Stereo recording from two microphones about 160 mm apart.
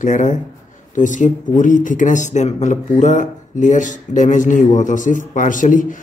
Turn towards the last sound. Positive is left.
turn(degrees=55)  # may be behind; listen again after turning